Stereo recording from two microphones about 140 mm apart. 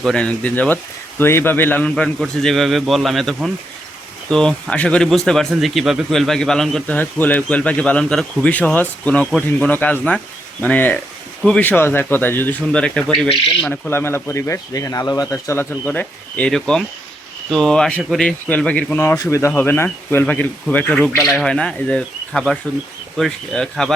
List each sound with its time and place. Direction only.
0.0 s speech: 5° left (ahead or behind)
13.9 s speech: 15° left (ahead or behind)